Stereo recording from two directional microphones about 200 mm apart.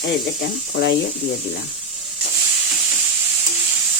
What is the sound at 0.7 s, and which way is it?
Speech, 65° left (ahead or behind).